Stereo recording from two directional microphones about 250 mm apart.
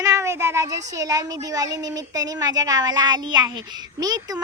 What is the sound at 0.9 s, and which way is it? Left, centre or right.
Speech, centre.